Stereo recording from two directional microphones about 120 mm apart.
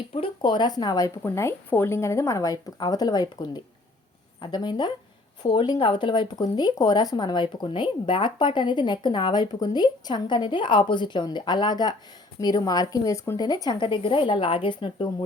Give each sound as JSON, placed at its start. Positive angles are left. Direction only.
{"t": 0.1, "sound": "speech", "side_deg": 45}